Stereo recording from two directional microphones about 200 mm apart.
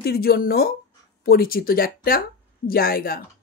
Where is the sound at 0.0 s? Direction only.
50° left (ahead or behind).